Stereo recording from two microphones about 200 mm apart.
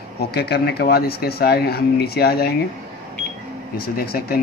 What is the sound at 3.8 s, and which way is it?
Speech, 50° left (ahead or behind).